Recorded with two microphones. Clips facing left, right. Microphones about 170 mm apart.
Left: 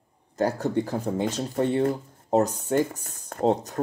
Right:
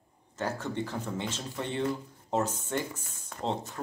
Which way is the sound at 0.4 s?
40° left (ahead or behind).